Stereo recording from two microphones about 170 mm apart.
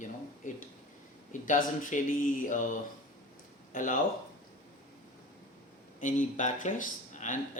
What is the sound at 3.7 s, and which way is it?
Speech, 50° left (ahead or behind).